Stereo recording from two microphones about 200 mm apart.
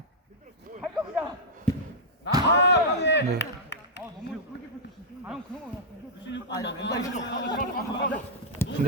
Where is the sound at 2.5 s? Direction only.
60° left (ahead or behind).